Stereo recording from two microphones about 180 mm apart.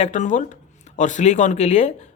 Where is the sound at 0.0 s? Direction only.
45° left (ahead or behind).